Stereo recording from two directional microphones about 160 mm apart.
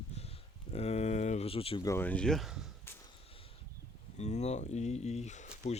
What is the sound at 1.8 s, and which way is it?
Speech, 15° left (ahead or behind).